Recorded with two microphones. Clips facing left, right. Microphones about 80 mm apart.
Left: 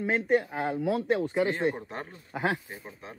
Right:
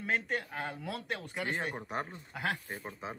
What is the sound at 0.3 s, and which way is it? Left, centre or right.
A man's voice, left.